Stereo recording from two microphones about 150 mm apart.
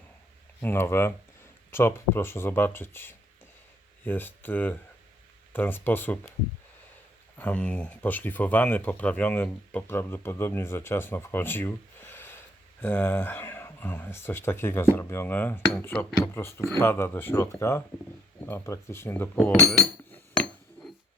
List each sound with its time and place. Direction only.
0.6 s speech: 15° left (ahead or behind)
7.3 s speech: 10° left (ahead or behind)